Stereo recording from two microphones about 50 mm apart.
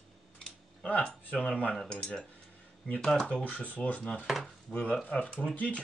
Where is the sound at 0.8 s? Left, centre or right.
Left.